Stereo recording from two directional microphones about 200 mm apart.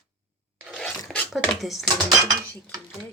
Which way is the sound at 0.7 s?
5° left (ahead or behind).